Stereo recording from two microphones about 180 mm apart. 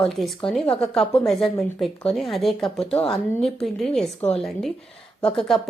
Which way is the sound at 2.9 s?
30° left (ahead or behind).